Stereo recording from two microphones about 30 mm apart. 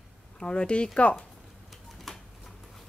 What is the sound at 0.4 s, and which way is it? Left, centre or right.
Speech, left.